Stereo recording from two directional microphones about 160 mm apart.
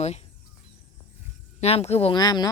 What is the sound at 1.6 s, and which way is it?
Speech, 40° left (ahead or behind).